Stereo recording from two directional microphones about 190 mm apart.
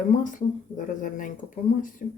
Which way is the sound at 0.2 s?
45° left (ahead or behind).